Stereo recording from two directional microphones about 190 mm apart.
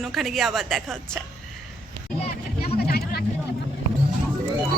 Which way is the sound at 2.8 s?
55° left (ahead or behind).